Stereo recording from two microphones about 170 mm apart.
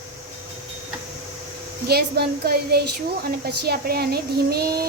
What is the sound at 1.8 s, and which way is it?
Speech, 65° right (ahead or behind).